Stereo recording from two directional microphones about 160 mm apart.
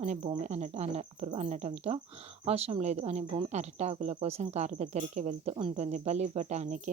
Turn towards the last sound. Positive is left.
turn(degrees=-50)  # may be behind; listen again after turning